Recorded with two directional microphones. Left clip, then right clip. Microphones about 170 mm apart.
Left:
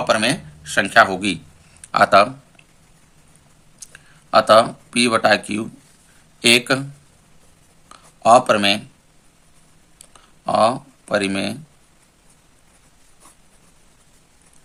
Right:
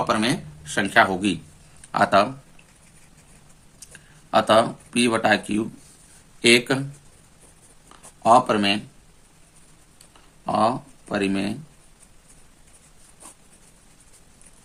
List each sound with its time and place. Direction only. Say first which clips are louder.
0.0 s speech: left 4 dB; 20° left (ahead or behind)
3.8 s speech: left 4 dB; 15° left (ahead or behind)
7.9 s a sound: left 4 dB; 20° left (ahead or behind)
10.4 s speech: left 5 dB; 25° left (ahead or behind)